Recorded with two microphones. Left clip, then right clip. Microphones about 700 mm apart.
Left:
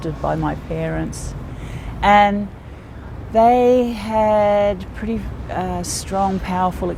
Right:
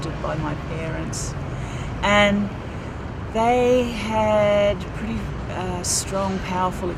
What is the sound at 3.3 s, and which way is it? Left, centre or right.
Speech, left.